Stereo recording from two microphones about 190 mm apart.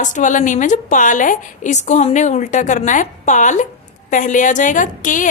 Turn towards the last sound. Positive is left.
turn(degrees=45)  # may be behind; listen again after turning